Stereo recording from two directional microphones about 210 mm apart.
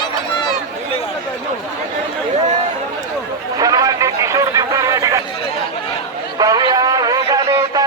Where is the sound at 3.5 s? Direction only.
15° right (ahead or behind).